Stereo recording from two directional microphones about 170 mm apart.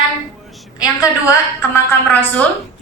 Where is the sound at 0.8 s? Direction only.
20° left (ahead or behind).